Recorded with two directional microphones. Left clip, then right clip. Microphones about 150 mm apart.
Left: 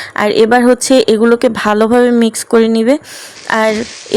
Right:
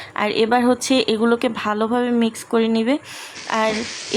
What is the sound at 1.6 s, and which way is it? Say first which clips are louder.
Speech: left 11 dB; 50° left (ahead or behind).